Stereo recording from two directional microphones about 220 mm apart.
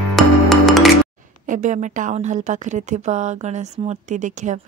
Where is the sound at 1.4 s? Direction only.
35° right (ahead or behind).